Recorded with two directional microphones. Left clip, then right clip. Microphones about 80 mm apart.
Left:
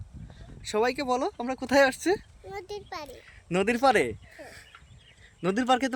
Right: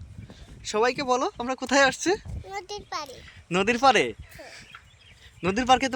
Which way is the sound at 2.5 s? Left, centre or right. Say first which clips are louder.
Right 4 dB; left.